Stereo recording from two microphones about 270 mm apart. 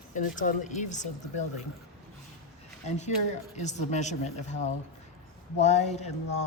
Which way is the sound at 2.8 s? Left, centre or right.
Left.